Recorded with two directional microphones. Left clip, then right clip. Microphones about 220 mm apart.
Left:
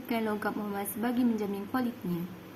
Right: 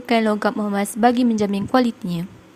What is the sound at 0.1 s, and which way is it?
A woman's voice, 40° right (ahead or behind).